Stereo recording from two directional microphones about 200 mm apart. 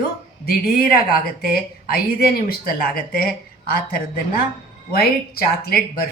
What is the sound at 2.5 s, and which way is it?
Speech, 45° left (ahead or behind).